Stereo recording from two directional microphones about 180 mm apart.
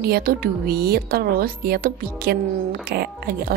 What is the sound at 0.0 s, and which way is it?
A woman's voice, 55° right (ahead or behind).